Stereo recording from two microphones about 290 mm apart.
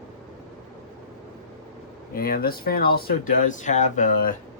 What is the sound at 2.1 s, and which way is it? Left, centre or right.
Speech, left.